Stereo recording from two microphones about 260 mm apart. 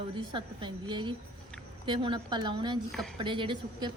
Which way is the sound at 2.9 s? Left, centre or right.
Centre.